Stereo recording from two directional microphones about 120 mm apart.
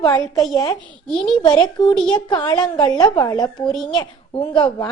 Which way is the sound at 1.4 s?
35° left (ahead or behind).